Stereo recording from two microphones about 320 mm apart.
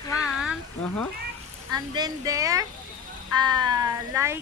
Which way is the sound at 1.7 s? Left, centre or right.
Centre.